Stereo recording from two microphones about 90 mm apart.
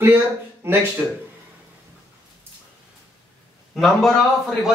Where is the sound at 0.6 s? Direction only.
25° right (ahead or behind).